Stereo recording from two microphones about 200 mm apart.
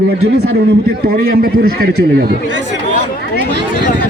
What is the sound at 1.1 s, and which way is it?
Speech, 50° right (ahead or behind).